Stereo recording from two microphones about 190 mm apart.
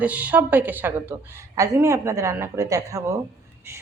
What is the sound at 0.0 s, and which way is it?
A woman's voice, 5° right (ahead or behind).